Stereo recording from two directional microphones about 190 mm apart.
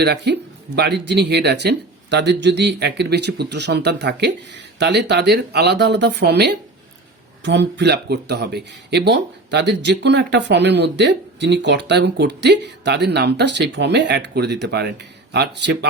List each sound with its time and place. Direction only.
0.0 s speech: 60° right (ahead or behind)